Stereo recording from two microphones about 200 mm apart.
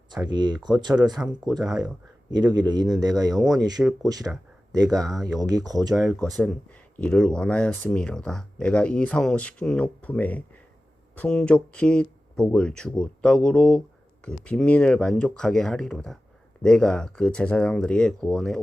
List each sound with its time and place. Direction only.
0.3 s speech: 20° right (ahead or behind)
1.2 s speech: 5° right (ahead or behind)
2.5 s speech: 20° right (ahead or behind)
5.9 s speech: centre (ahead or behind)